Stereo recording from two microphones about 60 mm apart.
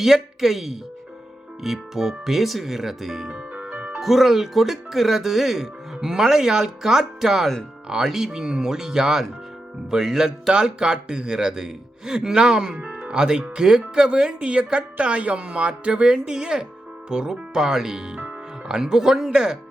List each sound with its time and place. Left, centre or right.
0.0 s speech: centre
3.3 s music: right
4.0 s speech: centre